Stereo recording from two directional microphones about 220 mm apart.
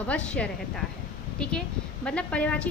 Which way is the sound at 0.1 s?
5° left (ahead or behind).